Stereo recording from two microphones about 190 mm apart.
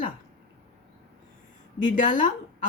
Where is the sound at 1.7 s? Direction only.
45° left (ahead or behind).